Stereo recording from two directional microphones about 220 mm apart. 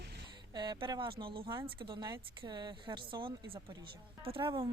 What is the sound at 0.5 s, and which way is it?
Speech, 20° right (ahead or behind).